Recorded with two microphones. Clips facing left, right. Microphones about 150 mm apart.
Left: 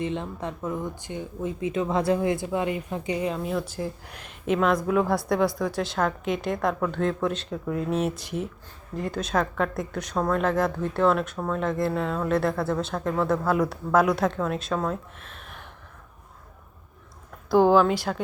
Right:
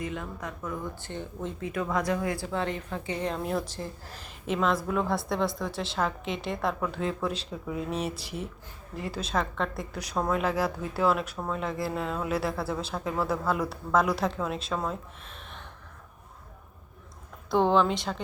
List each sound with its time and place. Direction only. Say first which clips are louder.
0.0 s a woman's voice: left 5 dB; 30° left (ahead or behind)
1.0 s a woman's voice: left 4 dB; 10° left (ahead or behind)
1.6 s a woman's voice: left 5 dB; 25° left (ahead or behind); by 15.5 s centre (ahead or behind)
17.5 s speech: left 5 dB; 5° left (ahead or behind)